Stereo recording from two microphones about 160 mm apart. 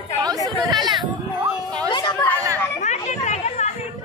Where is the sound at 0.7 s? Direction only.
25° right (ahead or behind).